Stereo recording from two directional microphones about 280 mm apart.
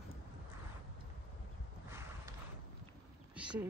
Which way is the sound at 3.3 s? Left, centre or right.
Centre.